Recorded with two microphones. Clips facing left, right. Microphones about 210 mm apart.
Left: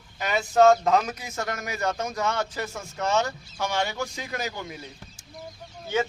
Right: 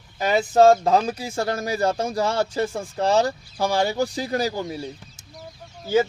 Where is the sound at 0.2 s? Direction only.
35° right (ahead or behind).